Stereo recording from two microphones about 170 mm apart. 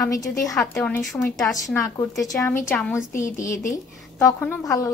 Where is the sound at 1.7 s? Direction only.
20° left (ahead or behind).